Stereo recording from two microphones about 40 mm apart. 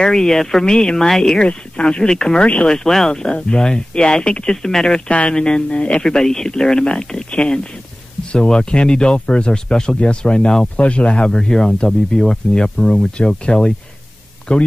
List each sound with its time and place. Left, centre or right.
0.0 s speech: centre
1.4 s speech: left
2.4 s speech: left
2.7 s speech: centre
3.1 s speech: left
4.5 s speech: centre
6.0 s speech: centre; by 9.6 s left
9.7 s speech: centre
11.3 s speech: centre